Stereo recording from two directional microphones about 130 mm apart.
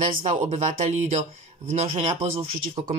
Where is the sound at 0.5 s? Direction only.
60° right (ahead or behind).